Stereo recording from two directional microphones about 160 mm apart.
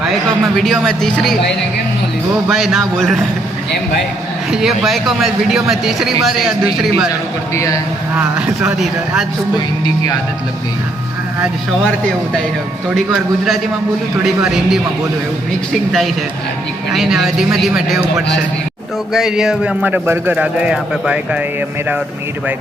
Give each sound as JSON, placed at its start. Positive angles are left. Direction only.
{"t": 0.5, "sound": "speech", "side_deg": 0}
{"t": 2.5, "sound": "speech", "side_deg": 0}
{"t": 4.5, "sound": "speech", "side_deg": 0}
{"t": 7.5, "sound": "a man's voice", "side_deg": 20}
{"t": 8.1, "sound": "speech", "side_deg": -5}
{"t": 13.1, "sound": "speech", "side_deg": -5}